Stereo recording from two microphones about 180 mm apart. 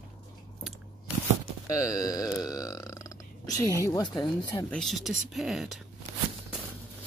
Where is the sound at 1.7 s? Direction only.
20° left (ahead or behind).